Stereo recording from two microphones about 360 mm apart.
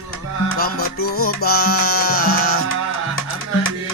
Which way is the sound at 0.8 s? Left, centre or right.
Left.